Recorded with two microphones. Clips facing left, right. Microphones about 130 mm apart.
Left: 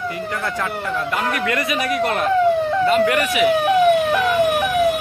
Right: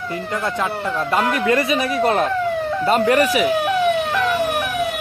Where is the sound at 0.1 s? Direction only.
20° right (ahead or behind).